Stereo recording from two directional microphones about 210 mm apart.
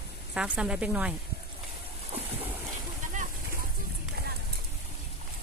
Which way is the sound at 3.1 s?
35° right (ahead or behind).